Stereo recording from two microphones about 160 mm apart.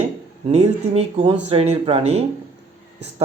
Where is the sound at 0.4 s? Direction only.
40° right (ahead or behind).